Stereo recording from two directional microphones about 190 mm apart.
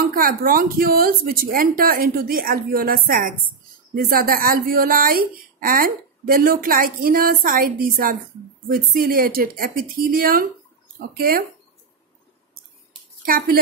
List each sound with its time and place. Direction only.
0.1 s a woman's voice: 50° right (ahead or behind)
13.2 s a woman's voice: 50° right (ahead or behind)